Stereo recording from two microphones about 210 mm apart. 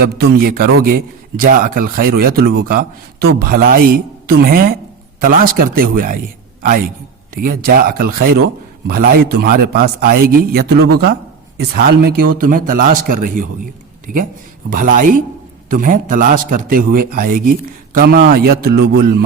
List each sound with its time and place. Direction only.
0.0 s a man's voice: 50° right (ahead or behind)